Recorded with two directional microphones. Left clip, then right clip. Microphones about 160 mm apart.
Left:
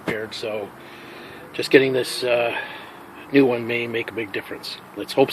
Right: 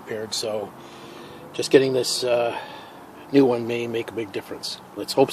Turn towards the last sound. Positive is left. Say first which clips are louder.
# left 1 dB
turn(degrees=-15)  # may be behind; listen again after turning